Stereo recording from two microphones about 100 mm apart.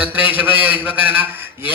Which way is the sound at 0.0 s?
20° right (ahead or behind).